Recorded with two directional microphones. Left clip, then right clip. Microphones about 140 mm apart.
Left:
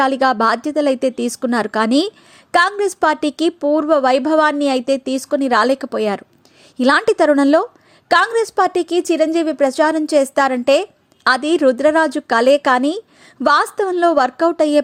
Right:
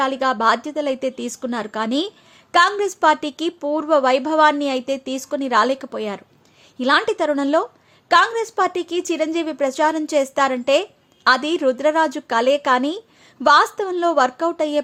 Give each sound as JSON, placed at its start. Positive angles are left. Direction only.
{"t": 0.0, "sound": "a woman's voice", "side_deg": 40}